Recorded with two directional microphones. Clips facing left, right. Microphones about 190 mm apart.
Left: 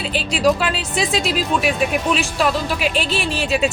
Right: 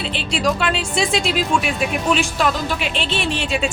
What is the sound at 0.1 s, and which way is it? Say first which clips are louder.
Speech: left 5 dB; 5° left (ahead or behind).